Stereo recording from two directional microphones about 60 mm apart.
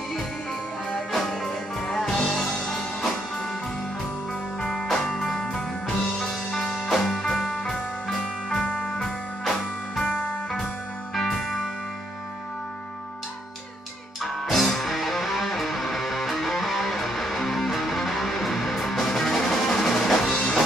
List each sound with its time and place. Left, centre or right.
1.1 s music: centre
4.8 s music: centre
11.1 s music: centre
14.2 s music: centre